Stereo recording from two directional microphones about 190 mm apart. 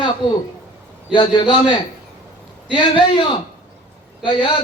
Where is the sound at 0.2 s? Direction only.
25° left (ahead or behind).